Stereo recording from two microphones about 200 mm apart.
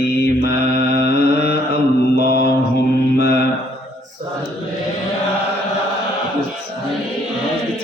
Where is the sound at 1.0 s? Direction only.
55° left (ahead or behind).